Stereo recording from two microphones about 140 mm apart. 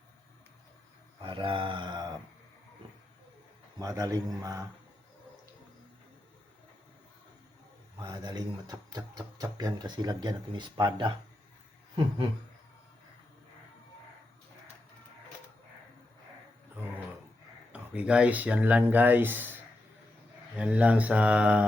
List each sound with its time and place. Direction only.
1.2 s mantra: 35° right (ahead or behind)
3.8 s speech: 25° right (ahead or behind)
7.9 s speech: 30° right (ahead or behind)
17.7 s speech: 10° right (ahead or behind)